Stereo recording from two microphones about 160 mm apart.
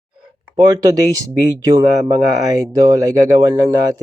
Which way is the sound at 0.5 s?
20° right (ahead or behind).